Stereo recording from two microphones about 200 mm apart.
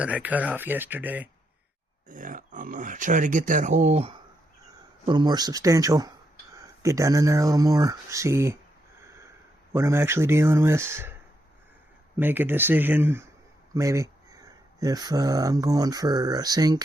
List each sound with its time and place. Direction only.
0.0 s speech: 5° right (ahead or behind)
2.0 s speech: 40° right (ahead or behind)
5.0 s speech: 20° right (ahead or behind)
9.7 s speech: 15° right (ahead or behind)
12.1 s speech: 10° right (ahead or behind)